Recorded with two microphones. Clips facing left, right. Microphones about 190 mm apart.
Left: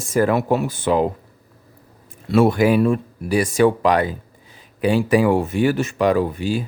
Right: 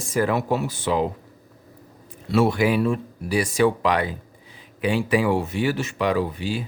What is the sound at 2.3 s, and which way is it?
Speech, 50° left (ahead or behind).